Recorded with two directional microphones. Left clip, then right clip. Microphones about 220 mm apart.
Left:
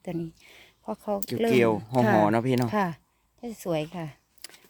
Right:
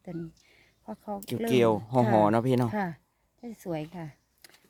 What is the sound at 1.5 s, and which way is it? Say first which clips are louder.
Speech: left 1 dB; 10° right (ahead or behind).